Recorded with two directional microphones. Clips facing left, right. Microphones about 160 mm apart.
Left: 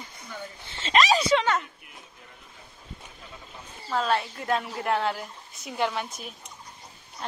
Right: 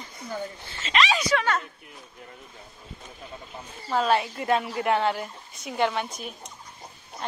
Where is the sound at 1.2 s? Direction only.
20° left (ahead or behind).